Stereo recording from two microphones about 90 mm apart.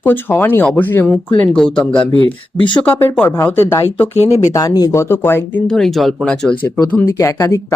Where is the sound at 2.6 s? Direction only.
65° left (ahead or behind).